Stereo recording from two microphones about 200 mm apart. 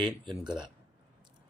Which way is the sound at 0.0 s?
Centre (ahead or behind).